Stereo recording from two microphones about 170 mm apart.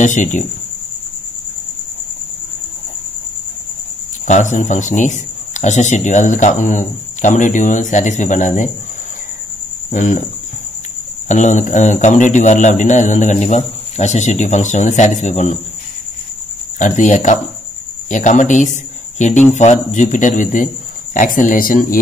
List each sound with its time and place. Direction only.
0.0 s speech: 45° left (ahead or behind)
4.3 s speech: 45° left (ahead or behind)
9.8 s cricket: 45° left (ahead or behind)
11.2 s speech: 45° left (ahead or behind)
16.7 s speech: 50° left (ahead or behind)